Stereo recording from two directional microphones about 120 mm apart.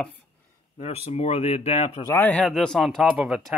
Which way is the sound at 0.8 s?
60° left (ahead or behind).